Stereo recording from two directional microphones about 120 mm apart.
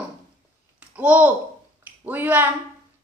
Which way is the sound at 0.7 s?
10° right (ahead or behind).